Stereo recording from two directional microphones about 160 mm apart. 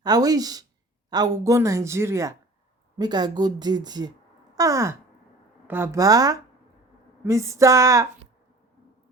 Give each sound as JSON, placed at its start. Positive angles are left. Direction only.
{"t": 0.0, "sound": "speech", "side_deg": -25}
{"t": 4.5, "sound": "sigh", "side_deg": -20}
{"t": 5.6, "sound": "speech", "side_deg": -15}